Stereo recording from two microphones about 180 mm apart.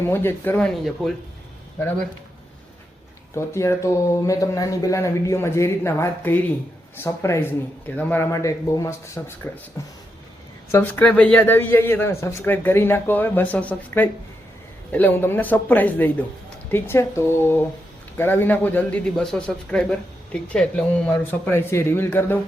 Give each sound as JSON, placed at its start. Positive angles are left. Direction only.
{"t": 0.0, "sound": "a man's voice", "side_deg": 15}
{"t": 3.3, "sound": "a man's voice", "side_deg": 15}